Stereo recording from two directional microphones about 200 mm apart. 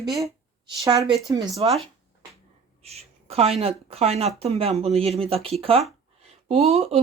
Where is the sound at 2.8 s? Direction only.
30° right (ahead or behind).